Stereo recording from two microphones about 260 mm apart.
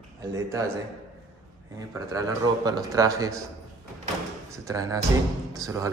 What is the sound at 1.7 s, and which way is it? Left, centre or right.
A man's voice, centre.